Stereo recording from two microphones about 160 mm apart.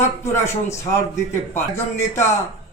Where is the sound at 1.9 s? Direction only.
15° left (ahead or behind).